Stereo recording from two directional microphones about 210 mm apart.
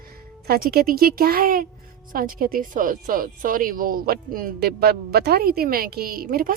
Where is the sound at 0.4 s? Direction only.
45° right (ahead or behind).